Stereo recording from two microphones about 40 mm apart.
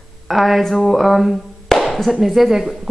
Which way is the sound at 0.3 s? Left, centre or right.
Centre.